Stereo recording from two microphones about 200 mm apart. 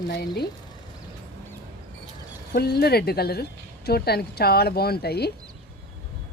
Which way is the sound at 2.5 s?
50° left (ahead or behind).